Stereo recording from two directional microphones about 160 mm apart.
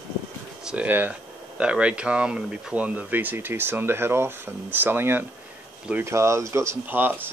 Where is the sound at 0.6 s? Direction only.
10° right (ahead or behind).